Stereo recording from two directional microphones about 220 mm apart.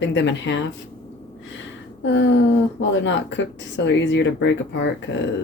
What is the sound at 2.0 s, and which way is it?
Speech, 55° left (ahead or behind).